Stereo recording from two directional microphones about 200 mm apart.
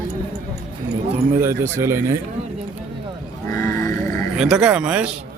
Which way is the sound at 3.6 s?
15° left (ahead or behind).